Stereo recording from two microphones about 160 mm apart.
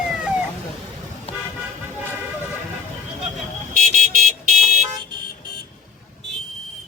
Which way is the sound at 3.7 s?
50° right (ahead or behind).